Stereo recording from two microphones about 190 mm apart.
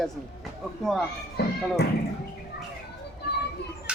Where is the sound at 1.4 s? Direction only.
60° left (ahead or behind).